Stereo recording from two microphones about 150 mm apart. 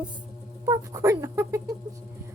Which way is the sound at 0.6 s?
20° right (ahead or behind).